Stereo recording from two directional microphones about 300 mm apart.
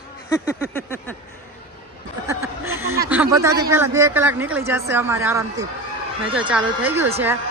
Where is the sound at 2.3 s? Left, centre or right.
Centre.